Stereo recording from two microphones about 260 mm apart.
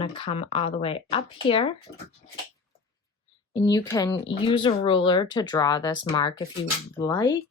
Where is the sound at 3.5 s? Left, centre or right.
Centre.